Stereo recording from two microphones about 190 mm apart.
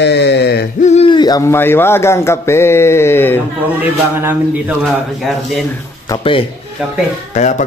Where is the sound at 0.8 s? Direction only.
35° left (ahead or behind); by 3.4 s 10° left (ahead or behind).